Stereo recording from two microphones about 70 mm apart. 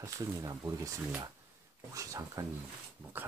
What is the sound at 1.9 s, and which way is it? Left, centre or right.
Speech, right.